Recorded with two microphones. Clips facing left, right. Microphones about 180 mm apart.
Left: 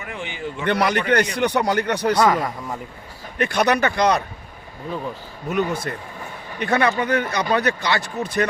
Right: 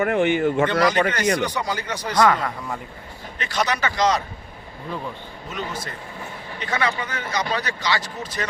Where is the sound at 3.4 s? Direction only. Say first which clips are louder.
Left 6 dB; 60° left (ahead or behind).